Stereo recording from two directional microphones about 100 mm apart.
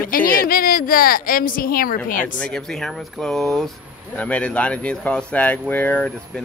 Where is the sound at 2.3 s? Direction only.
10° left (ahead or behind).